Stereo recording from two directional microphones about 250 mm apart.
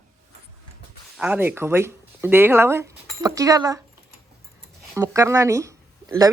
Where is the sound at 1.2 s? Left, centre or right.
Centre.